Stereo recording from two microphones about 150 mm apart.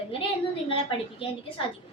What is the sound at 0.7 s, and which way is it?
Speech, 35° left (ahead or behind).